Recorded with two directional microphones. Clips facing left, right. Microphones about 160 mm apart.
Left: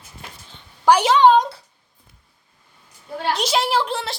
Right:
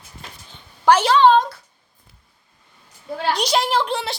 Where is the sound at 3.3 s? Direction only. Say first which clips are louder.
Even; centre (ahead or behind).